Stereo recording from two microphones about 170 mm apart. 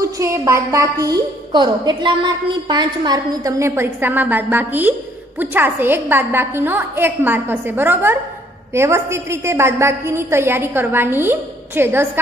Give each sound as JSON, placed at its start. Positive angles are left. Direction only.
{"t": 0.0, "sound": "a woman's voice", "side_deg": -15}